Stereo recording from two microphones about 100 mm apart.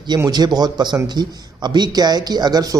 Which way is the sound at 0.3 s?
45° right (ahead or behind).